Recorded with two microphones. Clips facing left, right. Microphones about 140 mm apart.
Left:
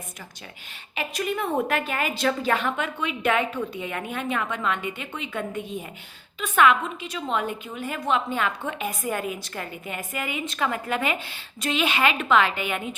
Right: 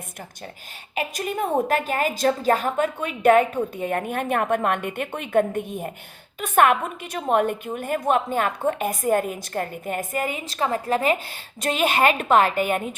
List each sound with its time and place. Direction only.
0.9 s a woman's voice: 45° right (ahead or behind)